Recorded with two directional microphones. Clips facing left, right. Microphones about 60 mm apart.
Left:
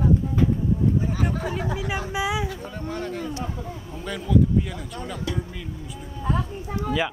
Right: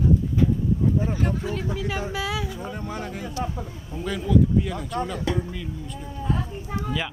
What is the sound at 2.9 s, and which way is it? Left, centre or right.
Speech, centre.